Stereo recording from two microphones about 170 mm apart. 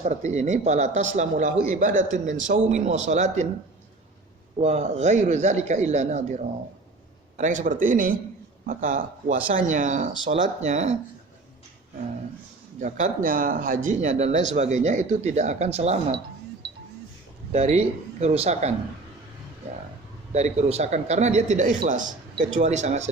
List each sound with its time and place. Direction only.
0.0 s speech: 45° right (ahead or behind)
4.6 s speech: 40° right (ahead or behind)
12.8 s speech: 50° right (ahead or behind)
17.5 s speech: 40° right (ahead or behind)
20.3 s speech: 40° right (ahead or behind)